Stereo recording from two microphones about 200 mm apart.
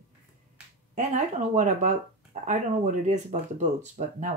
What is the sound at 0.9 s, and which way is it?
Speech, 35° right (ahead or behind).